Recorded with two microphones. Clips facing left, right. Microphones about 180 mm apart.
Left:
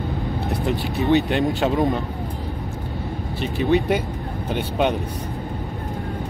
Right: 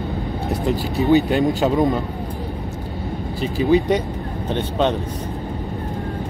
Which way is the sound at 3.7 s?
5° left (ahead or behind).